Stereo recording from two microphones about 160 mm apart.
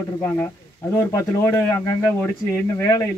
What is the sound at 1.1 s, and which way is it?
Speech, 20° left (ahead or behind).